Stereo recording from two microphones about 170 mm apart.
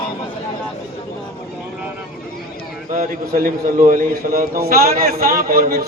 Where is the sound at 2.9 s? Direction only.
55° right (ahead or behind).